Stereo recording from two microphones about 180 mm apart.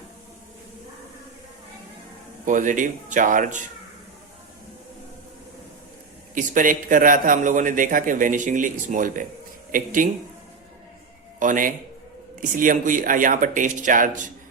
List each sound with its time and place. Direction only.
2.5 s a man's voice: 45° right (ahead or behind)
6.3 s a man's voice: 45° right (ahead or behind)
11.3 s a man's voice: 45° right (ahead or behind)